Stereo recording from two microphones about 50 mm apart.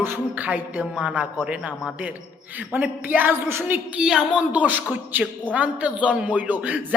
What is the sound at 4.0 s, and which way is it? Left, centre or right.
Speech, centre.